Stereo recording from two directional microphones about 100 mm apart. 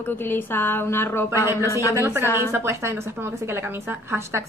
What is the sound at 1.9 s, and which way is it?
A woman's voice, 25° right (ahead or behind).